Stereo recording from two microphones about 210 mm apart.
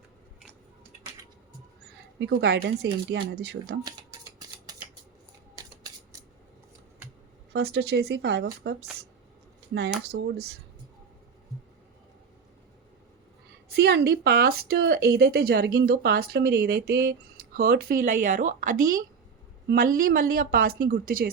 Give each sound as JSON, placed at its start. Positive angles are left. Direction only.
{"t": 2.1, "sound": "a woman's voice", "side_deg": -55}
{"t": 7.5, "sound": "a woman's voice", "side_deg": -50}
{"t": 10.1, "sound": "a woman's voice", "side_deg": -50}
{"t": 13.7, "sound": "a woman's voice", "side_deg": -50}